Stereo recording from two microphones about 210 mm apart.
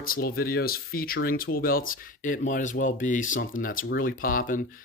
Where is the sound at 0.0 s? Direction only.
45° left (ahead or behind).